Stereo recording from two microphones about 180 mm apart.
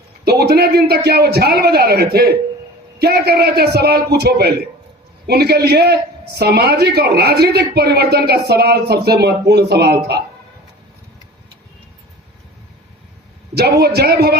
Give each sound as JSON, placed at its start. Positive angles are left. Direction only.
{"t": 0.3, "sound": "a man's voice", "side_deg": -60}
{"t": 13.5, "sound": "a man's voice", "side_deg": -65}